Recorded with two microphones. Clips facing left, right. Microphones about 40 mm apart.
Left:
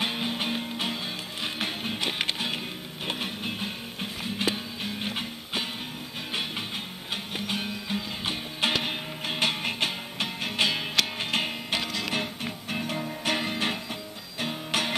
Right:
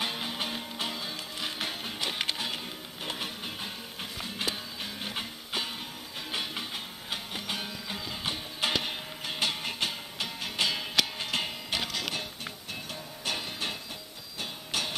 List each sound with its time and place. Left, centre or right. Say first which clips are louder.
0.0 s music: left 4 dB; centre
7.3 s music: left 4 dB; centre
11.8 s music: left 2 dB; centre
12.7 s music: left 9 dB; left